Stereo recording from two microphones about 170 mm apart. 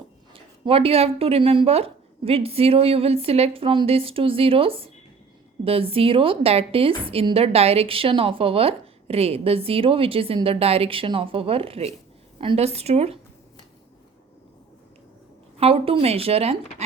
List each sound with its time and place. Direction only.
0.6 s a woman's voice: 35° right (ahead or behind)
15.5 s a woman's voice: 35° right (ahead or behind)